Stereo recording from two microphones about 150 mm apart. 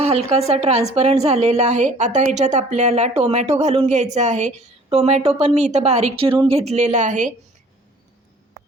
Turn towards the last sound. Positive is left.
turn(degrees=-55)  # may be behind; listen again after turning